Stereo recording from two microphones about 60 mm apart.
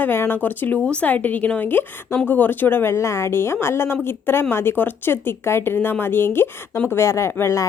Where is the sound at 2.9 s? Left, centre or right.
Left.